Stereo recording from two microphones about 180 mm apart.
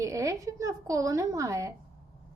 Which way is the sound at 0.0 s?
20° right (ahead or behind).